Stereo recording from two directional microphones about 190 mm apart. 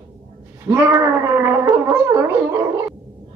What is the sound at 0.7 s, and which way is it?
Speech, 15° right (ahead or behind).